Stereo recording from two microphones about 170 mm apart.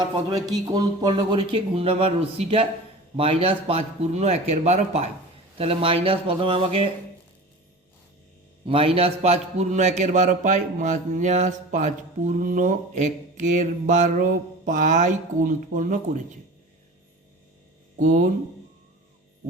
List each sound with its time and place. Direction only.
0.0 s speech: 20° right (ahead or behind)
8.6 s a man's voice: 35° right (ahead or behind); by 16.2 s 50° right (ahead or behind)
17.9 s speech: 45° right (ahead or behind)